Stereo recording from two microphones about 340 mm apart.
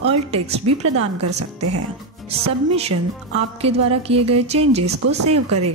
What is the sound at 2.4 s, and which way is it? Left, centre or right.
Speech, centre.